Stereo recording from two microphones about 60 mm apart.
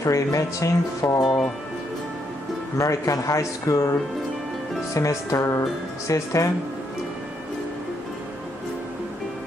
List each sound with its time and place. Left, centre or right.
0.0 s speech: left
1.2 s speech: centre
2.8 s speech: left
4.9 s speech: left